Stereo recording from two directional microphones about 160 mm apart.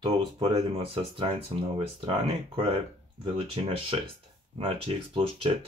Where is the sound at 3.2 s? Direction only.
35° right (ahead or behind).